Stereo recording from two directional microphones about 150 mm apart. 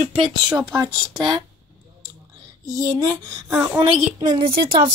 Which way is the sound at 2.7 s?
25° right (ahead or behind).